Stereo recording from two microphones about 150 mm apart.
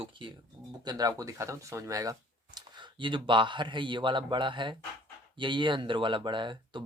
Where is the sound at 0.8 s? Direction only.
25° right (ahead or behind).